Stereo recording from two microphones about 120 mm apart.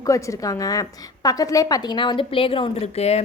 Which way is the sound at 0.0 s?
25° left (ahead or behind).